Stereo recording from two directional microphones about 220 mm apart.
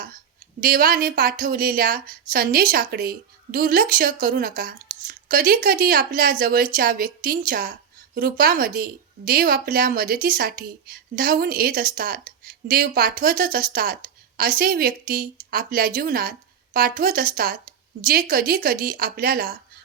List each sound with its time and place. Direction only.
0.6 s a woman's voice: 40° right (ahead or behind)